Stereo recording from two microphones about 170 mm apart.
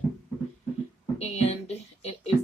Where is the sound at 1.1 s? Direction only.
40° left (ahead or behind).